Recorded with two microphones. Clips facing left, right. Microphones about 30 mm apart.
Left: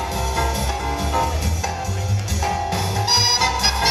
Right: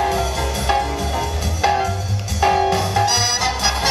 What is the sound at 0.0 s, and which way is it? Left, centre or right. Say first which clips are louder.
Music: right 3 dB; right.